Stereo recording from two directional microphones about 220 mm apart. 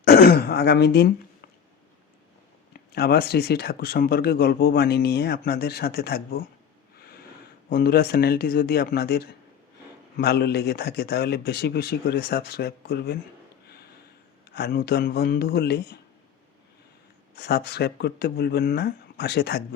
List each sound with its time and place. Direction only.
0.0 s throat clearing: 45° left (ahead or behind)
2.9 s speech: 45° left (ahead or behind)
7.7 s speech: 45° left (ahead or behind)
14.5 s speech: 45° left (ahead or behind)
17.3 s speech: 45° left (ahead or behind)